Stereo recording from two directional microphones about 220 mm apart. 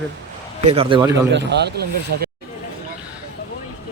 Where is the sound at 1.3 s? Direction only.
50° right (ahead or behind).